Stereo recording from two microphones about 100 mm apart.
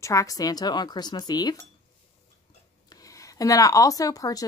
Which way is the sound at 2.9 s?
35° left (ahead or behind).